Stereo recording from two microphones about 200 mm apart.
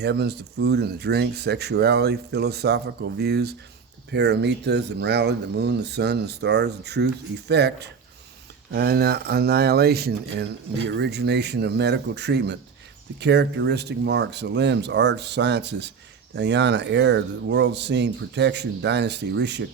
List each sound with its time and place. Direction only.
0.0 s speech: 55° right (ahead or behind)